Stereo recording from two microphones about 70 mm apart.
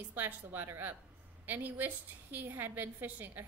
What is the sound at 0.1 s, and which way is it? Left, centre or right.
A woman's voice, right.